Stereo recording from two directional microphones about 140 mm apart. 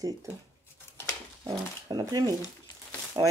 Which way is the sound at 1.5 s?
30° right (ahead or behind).